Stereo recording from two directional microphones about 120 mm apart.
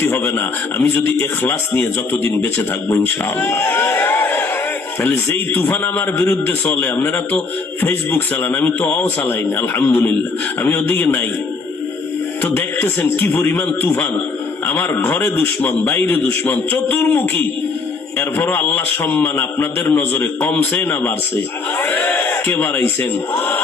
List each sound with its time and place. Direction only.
0.0 s a man's voice: 20° left (ahead or behind)
12.4 s a man's voice: 15° left (ahead or behind)